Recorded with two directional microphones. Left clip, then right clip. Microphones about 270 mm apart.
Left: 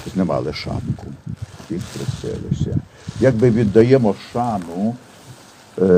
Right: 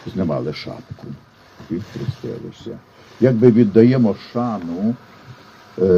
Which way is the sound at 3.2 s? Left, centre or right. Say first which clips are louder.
Right 2 dB; left.